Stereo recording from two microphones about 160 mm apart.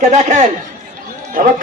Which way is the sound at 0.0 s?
50° right (ahead or behind).